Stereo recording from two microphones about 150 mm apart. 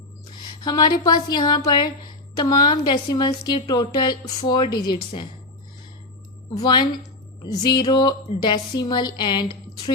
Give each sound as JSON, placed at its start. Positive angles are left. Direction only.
{"t": 0.6, "sound": "a woman's voice", "side_deg": 25}
{"t": 6.5, "sound": "a woman's voice", "side_deg": 30}